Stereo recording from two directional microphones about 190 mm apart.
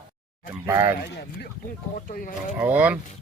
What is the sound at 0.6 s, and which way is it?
Speech, 15° right (ahead or behind).